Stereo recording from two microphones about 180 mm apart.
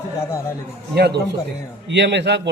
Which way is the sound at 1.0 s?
65° right (ahead or behind).